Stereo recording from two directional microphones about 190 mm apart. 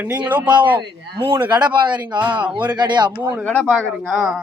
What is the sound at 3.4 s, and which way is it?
Speech, 5° left (ahead or behind).